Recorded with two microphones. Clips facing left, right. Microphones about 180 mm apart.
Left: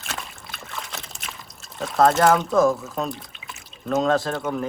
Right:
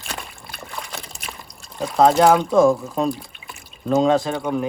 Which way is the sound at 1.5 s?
Centre (ahead or behind).